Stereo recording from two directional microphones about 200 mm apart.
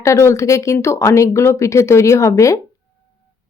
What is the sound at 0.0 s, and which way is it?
Speech, 15° left (ahead or behind).